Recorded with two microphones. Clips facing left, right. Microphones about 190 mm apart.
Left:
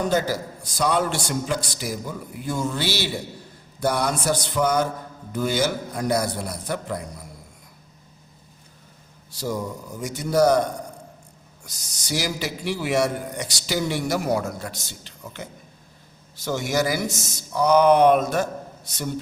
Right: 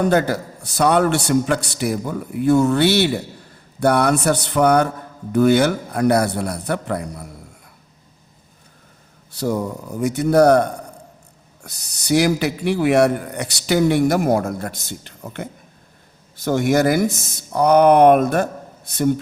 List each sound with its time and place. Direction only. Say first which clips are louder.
0.0 s speech: right 5 dB; 60° right (ahead or behind)
9.3 s speech: right 6 dB; 65° right (ahead or behind)